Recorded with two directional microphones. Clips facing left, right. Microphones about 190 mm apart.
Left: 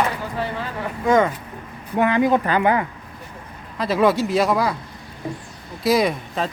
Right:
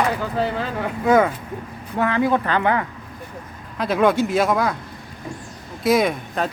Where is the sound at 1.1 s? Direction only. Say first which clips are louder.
Right 1 dB; 5° right (ahead or behind).